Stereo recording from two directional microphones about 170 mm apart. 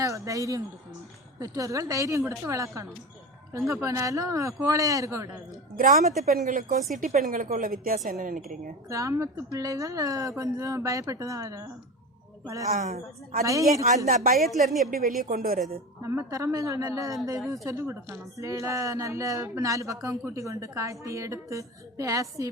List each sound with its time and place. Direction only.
0.0 s a sound: 20° right (ahead or behind)
1.4 s speech: 20° right (ahead or behind)
5.7 s speech: 50° right (ahead or behind)
8.9 s speech: 20° right (ahead or behind)
12.6 s speech: 45° right (ahead or behind)
13.4 s speech: 20° right (ahead or behind)
13.8 s speech: 45° right (ahead or behind)
14.8 s speech: 55° right (ahead or behind)
16.0 s speech: 20° right (ahead or behind)